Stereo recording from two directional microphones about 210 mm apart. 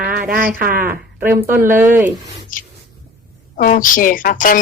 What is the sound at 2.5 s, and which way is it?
Speech, 40° left (ahead or behind).